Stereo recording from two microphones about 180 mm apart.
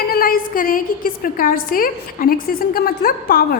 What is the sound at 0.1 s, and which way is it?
A woman's voice, 55° left (ahead or behind).